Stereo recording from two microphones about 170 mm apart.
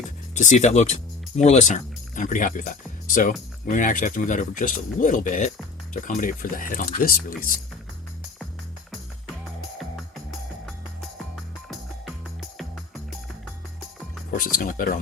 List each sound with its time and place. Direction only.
0.3 s speech: 45° left (ahead or behind)
12.5 s music: centre (ahead or behind)
14.3 s speech: 55° left (ahead or behind)